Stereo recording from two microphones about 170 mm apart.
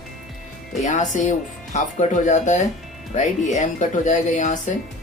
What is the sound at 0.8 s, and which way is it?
Speech, 45° left (ahead or behind).